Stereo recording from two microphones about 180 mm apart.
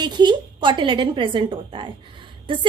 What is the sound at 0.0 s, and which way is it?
A woman's voice, 25° right (ahead or behind).